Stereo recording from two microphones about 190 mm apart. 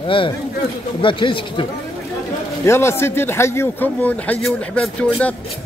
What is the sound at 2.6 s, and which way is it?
Speech, 15° left (ahead or behind).